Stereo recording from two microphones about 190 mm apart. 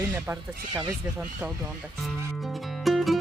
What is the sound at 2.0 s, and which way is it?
Music, centre (ahead or behind).